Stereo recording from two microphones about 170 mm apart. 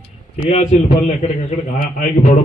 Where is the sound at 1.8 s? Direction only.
55° left (ahead or behind).